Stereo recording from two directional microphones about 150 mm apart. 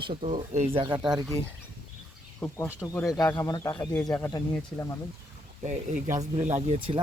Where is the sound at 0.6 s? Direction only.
35° right (ahead or behind).